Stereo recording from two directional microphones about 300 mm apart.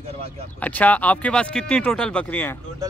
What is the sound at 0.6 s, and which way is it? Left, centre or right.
Speech, centre.